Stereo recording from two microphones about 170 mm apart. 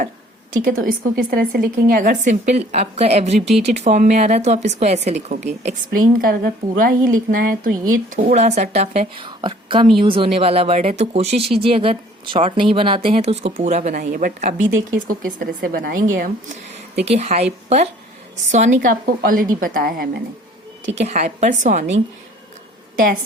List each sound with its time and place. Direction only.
0.6 s speech: 55° right (ahead or behind)
6.2 s speech: 55° right (ahead or behind)
16.9 s speech: 40° right (ahead or behind); by 20.2 s 60° right (ahead or behind)
21.0 s a woman's voice: 40° right (ahead or behind)